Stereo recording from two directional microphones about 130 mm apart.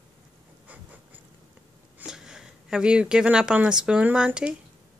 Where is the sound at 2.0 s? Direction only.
5° right (ahead or behind).